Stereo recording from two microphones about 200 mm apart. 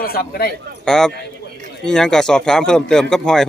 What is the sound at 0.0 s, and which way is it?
Speech, 50° left (ahead or behind).